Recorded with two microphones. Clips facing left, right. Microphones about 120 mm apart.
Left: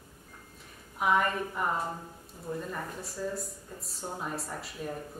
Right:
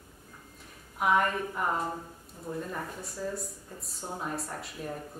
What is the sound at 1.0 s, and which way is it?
Speech, centre (ahead or behind).